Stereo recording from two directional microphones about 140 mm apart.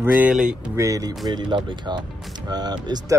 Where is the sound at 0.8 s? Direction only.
25° right (ahead or behind).